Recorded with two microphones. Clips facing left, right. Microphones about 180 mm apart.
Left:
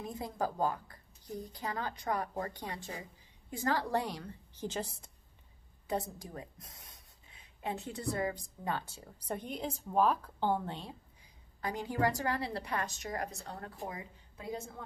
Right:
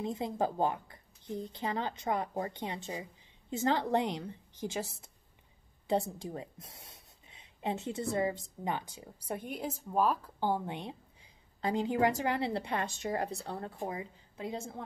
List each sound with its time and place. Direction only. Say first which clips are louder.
0.0 s a woman's voice: right 4 dB; 25° right (ahead or behind)
4.6 s speech: right 1 dB; 10° right (ahead or behind)
5.9 s a woman's voice: right 5 dB; 25° right (ahead or behind)